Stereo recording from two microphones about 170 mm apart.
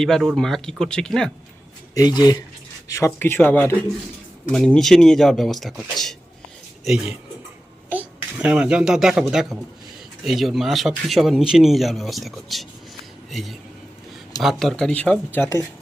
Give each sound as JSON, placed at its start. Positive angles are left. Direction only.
{"t": 0.0, "sound": "speech", "side_deg": 0}
{"t": 2.0, "sound": "speech", "side_deg": 25}
{"t": 7.9, "sound": "a child's voice", "side_deg": -10}